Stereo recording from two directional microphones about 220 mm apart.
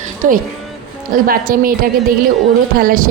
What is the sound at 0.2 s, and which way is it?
A woman's voice, 35° right (ahead or behind).